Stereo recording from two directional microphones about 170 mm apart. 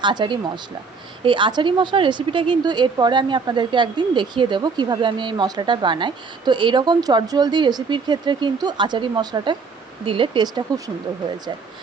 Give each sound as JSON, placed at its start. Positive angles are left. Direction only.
{"t": 0.0, "sound": "speech", "side_deg": -25}